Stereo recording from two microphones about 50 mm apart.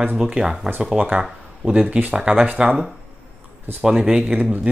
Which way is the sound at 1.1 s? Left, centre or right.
Centre.